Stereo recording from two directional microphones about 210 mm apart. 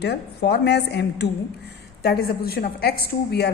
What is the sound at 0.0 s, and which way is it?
A woman's voice, 50° left (ahead or behind).